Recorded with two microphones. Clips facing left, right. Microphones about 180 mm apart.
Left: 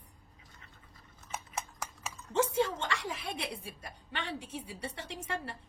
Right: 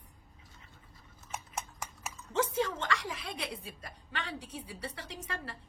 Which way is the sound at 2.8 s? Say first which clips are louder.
Right 1 dB; 25° left (ahead or behind).